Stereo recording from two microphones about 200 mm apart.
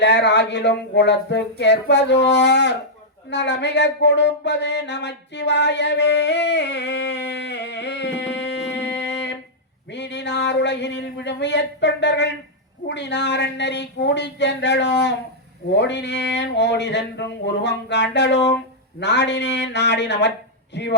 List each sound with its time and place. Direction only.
0.0 s speech: 60° left (ahead or behind)
3.2 s a sound: 60° left (ahead or behind)
9.9 s speech: 60° left (ahead or behind)